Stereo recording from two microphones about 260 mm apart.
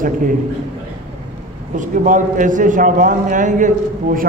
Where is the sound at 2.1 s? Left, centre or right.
Right.